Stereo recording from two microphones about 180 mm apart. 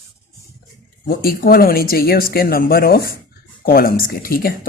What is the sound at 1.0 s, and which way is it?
Speech, 55° left (ahead or behind).